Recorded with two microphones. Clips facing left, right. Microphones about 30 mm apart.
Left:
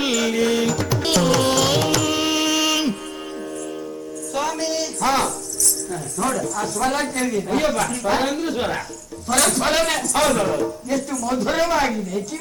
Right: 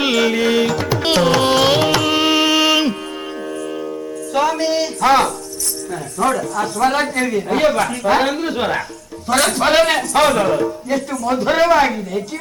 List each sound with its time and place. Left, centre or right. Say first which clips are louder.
0.0 s music: right 4 dB; right
4.4 s a sound: right 7 dB; right
6.1 s speech: right 5 dB; right